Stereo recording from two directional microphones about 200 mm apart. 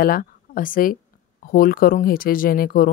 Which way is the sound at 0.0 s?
45° left (ahead or behind).